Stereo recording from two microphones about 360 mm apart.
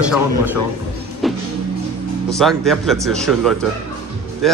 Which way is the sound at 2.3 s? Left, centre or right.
Centre.